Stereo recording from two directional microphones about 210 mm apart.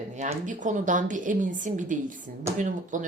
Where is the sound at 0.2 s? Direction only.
35° right (ahead or behind).